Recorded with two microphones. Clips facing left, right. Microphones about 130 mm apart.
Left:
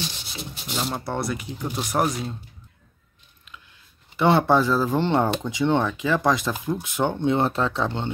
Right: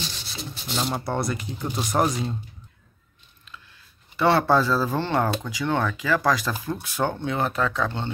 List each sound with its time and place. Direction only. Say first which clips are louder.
0.7 s speech: right 1 dB; centre (ahead or behind)
4.2 s speech: left 1 dB; 20° left (ahead or behind)